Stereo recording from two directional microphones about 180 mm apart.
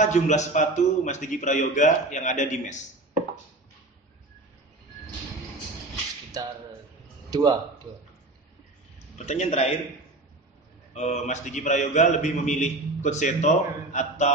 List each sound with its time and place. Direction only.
0.0 s a man's voice: 40° left (ahead or behind)
7.2 s speech: 20° right (ahead or behind)
9.2 s a man's voice: 40° left (ahead or behind)
11.0 s a man's voice: 40° left (ahead or behind)